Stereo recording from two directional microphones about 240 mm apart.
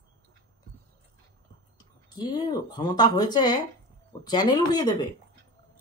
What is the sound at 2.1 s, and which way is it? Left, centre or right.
Speech, centre.